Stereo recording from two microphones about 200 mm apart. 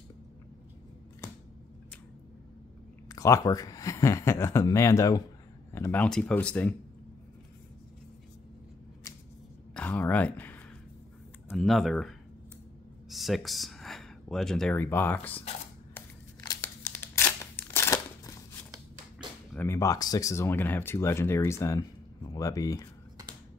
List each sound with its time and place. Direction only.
3.1 s speech: 15° left (ahead or behind)
9.8 s speech: 10° left (ahead or behind)
13.1 s speech: centre (ahead or behind)
15.9 s a sound: 15° left (ahead or behind)
19.5 s speech: 10° left (ahead or behind)